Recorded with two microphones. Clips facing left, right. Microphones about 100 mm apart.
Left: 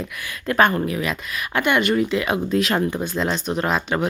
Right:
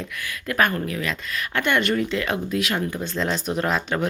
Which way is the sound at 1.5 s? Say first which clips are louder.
Left 3 dB; 10° left (ahead or behind).